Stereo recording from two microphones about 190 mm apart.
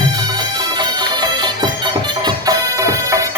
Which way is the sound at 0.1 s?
20° right (ahead or behind).